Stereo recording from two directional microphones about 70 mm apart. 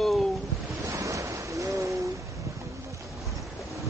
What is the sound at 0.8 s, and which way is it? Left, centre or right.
Ocean, right.